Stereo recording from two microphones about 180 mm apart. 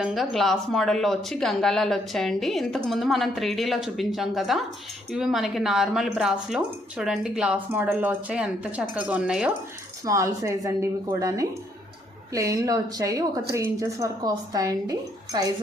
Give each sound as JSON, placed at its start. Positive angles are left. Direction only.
{"t": 0.0, "sound": "speech", "side_deg": 0}
{"t": 10.0, "sound": "a woman's voice", "side_deg": -15}